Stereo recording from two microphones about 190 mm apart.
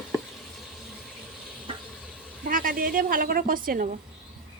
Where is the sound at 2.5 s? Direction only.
45° right (ahead or behind).